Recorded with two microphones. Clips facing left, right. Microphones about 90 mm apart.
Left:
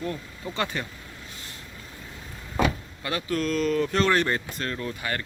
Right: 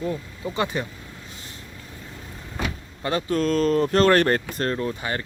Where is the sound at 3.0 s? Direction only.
35° right (ahead or behind).